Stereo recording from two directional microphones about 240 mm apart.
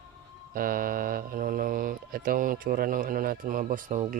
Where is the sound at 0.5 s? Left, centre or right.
Right.